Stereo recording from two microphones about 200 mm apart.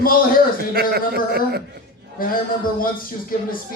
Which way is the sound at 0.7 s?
50° right (ahead or behind).